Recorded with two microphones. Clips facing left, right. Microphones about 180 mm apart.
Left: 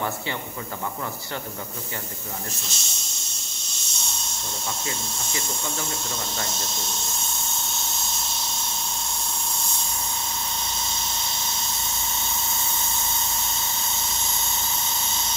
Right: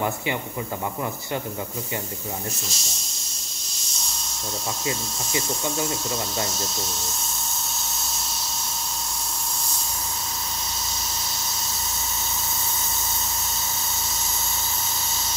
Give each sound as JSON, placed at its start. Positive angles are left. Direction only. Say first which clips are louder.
{"t": 2.7, "sound": "speech", "louder": "right 2 dB", "side_deg": 0}
{"t": 4.8, "sound": "speech", "louder": "right 4 dB", "side_deg": -20}
{"t": 6.5, "sound": "speech", "louder": "right 2 dB", "side_deg": 0}
{"t": 7.7, "sound": "a sound", "louder": "left 1 dB", "side_deg": 0}